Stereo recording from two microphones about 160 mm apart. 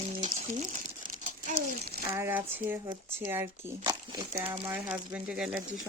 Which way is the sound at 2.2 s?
10° right (ahead or behind).